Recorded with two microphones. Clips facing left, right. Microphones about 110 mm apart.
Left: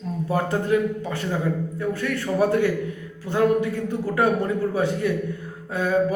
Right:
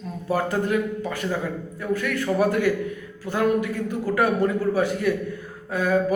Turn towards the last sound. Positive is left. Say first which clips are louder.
# even
turn(degrees=25)  # may be behind; listen again after turning